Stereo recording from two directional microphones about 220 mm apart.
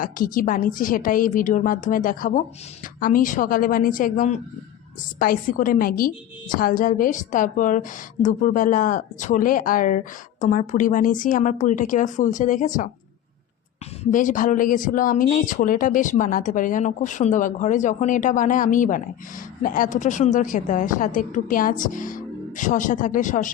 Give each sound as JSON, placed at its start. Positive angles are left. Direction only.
{"t": 0.0, "sound": "a woman's voice", "side_deg": 40}
{"t": 14.0, "sound": "a woman's voice", "side_deg": 35}